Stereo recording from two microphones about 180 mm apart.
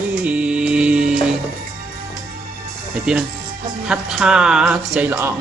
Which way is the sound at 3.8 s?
5° right (ahead or behind).